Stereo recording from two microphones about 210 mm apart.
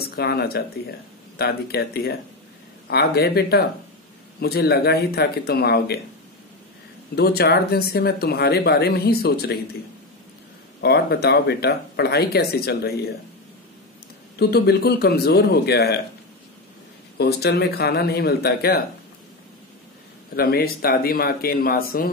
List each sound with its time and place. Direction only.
0.0 s speech: 50° left (ahead or behind)
7.2 s speech: 50° left (ahead or behind)
10.8 s speech: 50° left (ahead or behind)
14.4 s speech: 50° left (ahead or behind)
17.2 s speech: 50° left (ahead or behind)
20.3 s speech: 45° left (ahead or behind)